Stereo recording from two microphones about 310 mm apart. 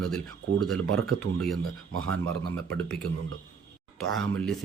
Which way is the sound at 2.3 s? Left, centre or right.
Right.